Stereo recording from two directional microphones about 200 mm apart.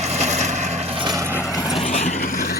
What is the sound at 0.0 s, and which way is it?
Vehicle, 35° right (ahead or behind).